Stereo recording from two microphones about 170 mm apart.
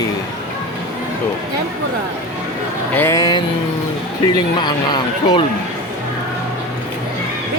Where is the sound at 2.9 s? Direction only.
15° left (ahead or behind).